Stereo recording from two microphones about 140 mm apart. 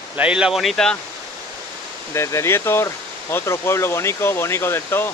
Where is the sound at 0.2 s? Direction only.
5° right (ahead or behind).